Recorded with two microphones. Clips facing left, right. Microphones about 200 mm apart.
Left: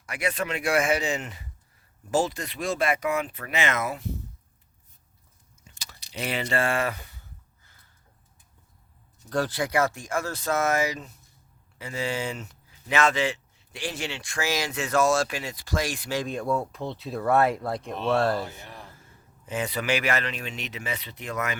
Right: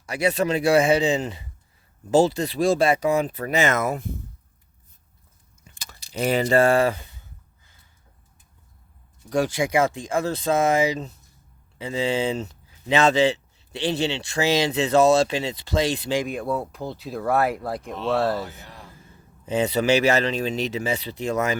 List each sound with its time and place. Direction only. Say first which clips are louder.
0.0 s speech: right 7 dB; 35° right (ahead or behind); by 4.1 s 50° right (ahead or behind)
5.6 s speech: right 2 dB; 55° right (ahead or behind); by 7.0 s 30° right (ahead or behind)
9.3 s speech: right 4 dB; 15° right (ahead or behind)
16.2 s speech: right 1 dB; centre (ahead or behind)
18.4 s a sound: even; 20° left (ahead or behind)
19.5 s speech: right 7 dB; 25° right (ahead or behind)